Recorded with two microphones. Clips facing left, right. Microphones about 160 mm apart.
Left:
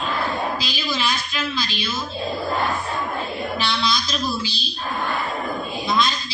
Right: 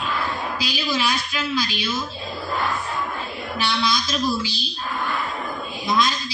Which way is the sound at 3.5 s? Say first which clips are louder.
Right 2 dB; 10° right (ahead or behind).